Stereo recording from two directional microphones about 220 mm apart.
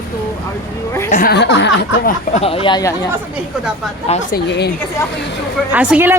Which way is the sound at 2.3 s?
25° left (ahead or behind).